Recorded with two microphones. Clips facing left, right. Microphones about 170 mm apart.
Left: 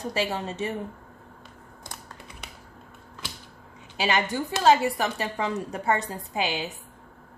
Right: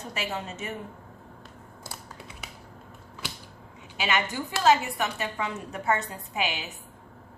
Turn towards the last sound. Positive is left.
turn(degrees=35)  # may be behind; listen again after turning